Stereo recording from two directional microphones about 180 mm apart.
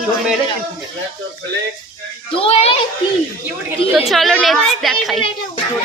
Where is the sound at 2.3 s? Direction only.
35° left (ahead or behind).